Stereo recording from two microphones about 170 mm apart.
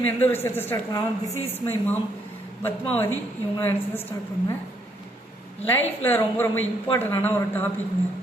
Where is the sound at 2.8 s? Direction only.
35° left (ahead or behind).